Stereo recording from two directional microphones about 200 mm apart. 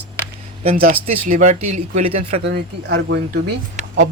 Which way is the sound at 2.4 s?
60° right (ahead or behind).